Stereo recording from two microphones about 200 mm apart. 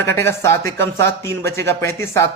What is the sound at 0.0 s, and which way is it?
Speech, 15° left (ahead or behind).